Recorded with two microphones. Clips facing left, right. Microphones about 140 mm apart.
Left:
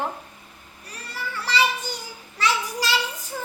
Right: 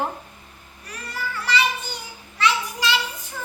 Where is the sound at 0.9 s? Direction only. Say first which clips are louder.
Right 3 dB; 30° left (ahead or behind).